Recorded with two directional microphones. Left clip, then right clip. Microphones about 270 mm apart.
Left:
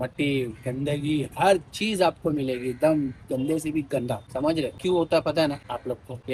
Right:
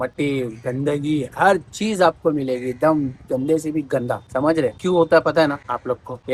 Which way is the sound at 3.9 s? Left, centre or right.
Right.